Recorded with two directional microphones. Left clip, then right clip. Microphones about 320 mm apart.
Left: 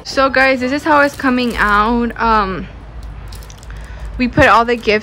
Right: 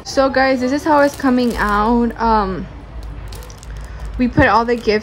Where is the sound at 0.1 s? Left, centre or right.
Centre.